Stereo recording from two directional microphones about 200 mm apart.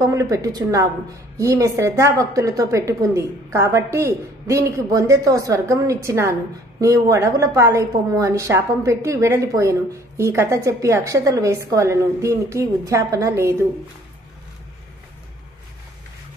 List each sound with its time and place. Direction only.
0.0 s a woman's voice: 15° right (ahead or behind)